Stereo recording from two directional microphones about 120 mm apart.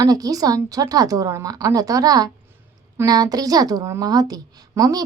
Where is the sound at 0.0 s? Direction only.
30° right (ahead or behind).